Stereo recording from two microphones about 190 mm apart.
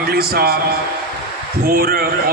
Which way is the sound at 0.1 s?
55° right (ahead or behind).